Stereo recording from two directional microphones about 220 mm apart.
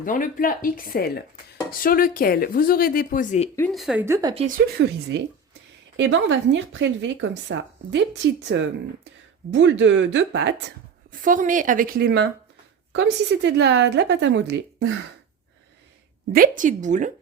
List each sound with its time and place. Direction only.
0.0 s speech: 35° left (ahead or behind)
3.5 s a woman's voice: 5° left (ahead or behind)
4.0 s speech: 15° right (ahead or behind)
4.4 s a woman's voice: 40° right (ahead or behind)
6.0 s speech: 55° right (ahead or behind)
11.1 s a woman's voice: 35° right (ahead or behind); by 14.9 s 55° right (ahead or behind)
16.3 s a woman's voice: 40° right (ahead or behind)